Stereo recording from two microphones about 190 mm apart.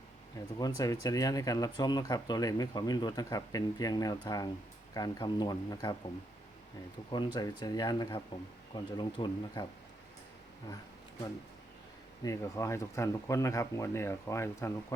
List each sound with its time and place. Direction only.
0.6 s speech: 20° left (ahead or behind)
7.1 s speech: 25° left (ahead or behind)
12.2 s speech: 15° left (ahead or behind)